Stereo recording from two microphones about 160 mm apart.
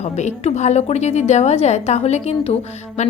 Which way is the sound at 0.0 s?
45° left (ahead or behind).